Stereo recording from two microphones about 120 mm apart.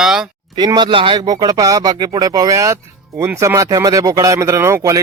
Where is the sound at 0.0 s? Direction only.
5° right (ahead or behind).